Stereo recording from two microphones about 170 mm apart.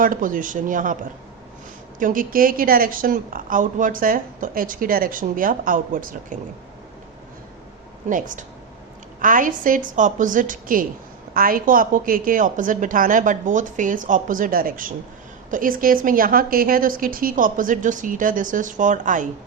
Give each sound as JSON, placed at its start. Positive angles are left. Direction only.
{"t": 0.0, "sound": "a woman's voice", "side_deg": -55}
{"t": 2.0, "sound": "a woman's voice", "side_deg": -50}
{"t": 8.1, "sound": "a woman's voice", "side_deg": -50}